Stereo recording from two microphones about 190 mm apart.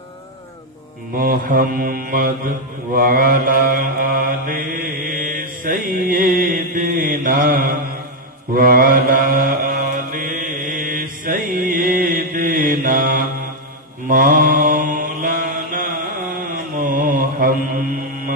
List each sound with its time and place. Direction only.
1.1 s mantra: 50° right (ahead or behind)